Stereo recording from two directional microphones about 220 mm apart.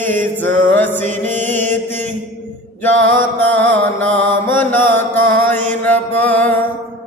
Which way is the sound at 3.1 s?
10° left (ahead or behind).